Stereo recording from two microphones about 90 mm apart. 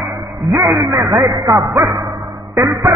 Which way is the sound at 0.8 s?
35° right (ahead or behind).